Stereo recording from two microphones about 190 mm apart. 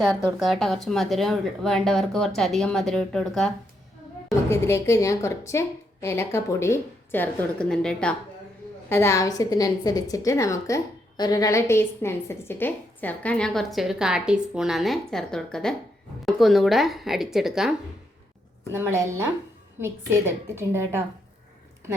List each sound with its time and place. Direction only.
0.3 s a woman's voice: centre (ahead or behind)
4.3 s a woman's voice: 15° left (ahead or behind); by 17.7 s centre (ahead or behind)
18.7 s a woman's voice: 15° right (ahead or behind)